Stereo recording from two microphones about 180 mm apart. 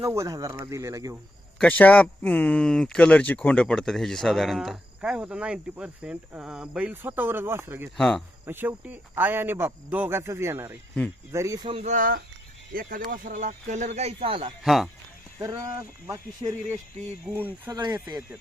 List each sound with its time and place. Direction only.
0.0 s speech: 15° right (ahead or behind)
1.5 s speech: 5° left (ahead or behind); by 7.9 s 10° right (ahead or behind)
7.9 s speech: 5° left (ahead or behind)
8.4 s speech: 10° right (ahead or behind)
11.7 s speech: 40° right (ahead or behind)
14.6 s speech: centre (ahead or behind)
16.0 s speech: 15° right (ahead or behind)
17.7 s speech: 20° right (ahead or behind)